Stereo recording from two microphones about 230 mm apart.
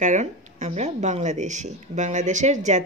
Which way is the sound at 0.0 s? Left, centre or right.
Right.